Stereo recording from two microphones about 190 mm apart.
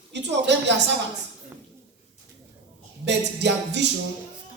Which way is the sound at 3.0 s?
65° right (ahead or behind).